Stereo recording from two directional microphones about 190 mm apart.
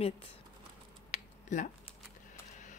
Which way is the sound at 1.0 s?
40° left (ahead or behind).